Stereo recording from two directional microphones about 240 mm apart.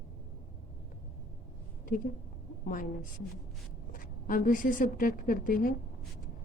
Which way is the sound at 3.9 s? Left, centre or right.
Left.